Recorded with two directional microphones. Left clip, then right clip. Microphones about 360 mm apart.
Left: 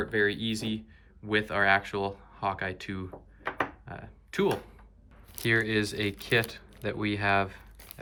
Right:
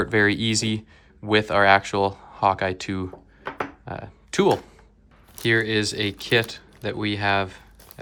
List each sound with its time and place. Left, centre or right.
0.0 s speech: centre